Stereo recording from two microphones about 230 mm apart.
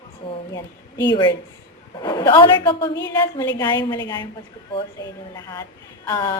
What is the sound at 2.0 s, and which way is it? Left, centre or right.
A woman's voice, centre.